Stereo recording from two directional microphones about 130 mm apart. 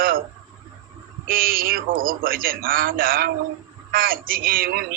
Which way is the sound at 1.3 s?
90° right.